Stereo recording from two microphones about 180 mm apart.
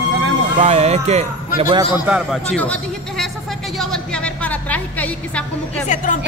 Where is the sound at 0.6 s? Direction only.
35° right (ahead or behind).